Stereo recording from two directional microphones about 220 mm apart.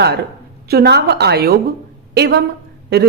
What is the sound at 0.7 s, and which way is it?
A woman's voice, 45° right (ahead or behind).